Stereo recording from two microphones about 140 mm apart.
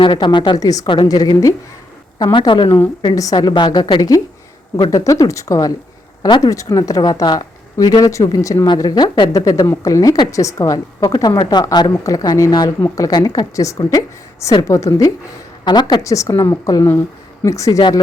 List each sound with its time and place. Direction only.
0.0 s a woman's voice: 35° left (ahead or behind)